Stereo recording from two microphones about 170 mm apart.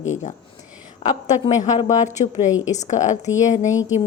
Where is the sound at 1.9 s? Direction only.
45° left (ahead or behind).